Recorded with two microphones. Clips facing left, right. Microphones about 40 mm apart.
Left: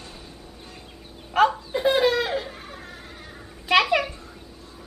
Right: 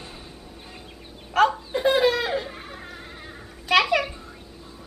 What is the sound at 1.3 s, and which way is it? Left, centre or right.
Laughter, centre.